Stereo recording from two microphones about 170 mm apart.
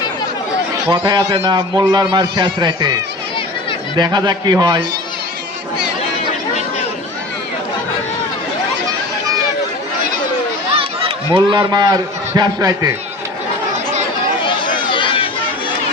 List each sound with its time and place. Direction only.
0.9 s a man's voice: 25° right (ahead or behind)
3.9 s a man's voice: 25° right (ahead or behind)
10.8 s a man's voice: 30° right (ahead or behind)
14.4 s a sound: 30° left (ahead or behind)